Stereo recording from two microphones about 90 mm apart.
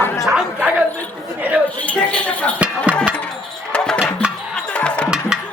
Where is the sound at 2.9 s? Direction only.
15° right (ahead or behind).